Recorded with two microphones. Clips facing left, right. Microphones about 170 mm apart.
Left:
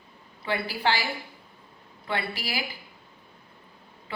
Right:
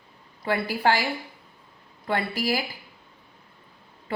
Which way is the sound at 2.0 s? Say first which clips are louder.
Right 6 dB; 45° right (ahead or behind).